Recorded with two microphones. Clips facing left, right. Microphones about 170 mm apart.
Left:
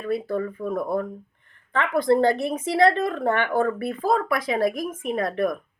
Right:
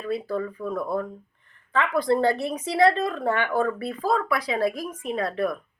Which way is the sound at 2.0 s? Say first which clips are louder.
Left 3 dB; 50° left (ahead or behind).